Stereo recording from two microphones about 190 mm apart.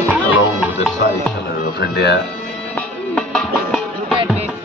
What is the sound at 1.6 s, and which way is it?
Music, 60° left (ahead or behind).